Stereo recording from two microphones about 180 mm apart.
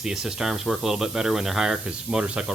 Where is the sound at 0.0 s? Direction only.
Centre (ahead or behind).